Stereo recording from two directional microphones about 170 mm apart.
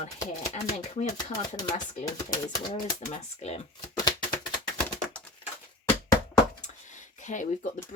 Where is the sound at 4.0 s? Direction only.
25° left (ahead or behind).